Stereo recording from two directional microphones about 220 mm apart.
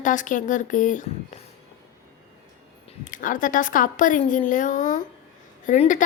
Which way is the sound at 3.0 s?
35° left (ahead or behind).